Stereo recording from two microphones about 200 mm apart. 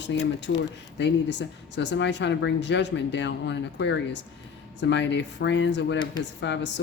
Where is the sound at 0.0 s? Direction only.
60° left (ahead or behind).